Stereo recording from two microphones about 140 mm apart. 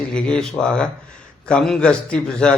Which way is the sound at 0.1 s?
5° left (ahead or behind).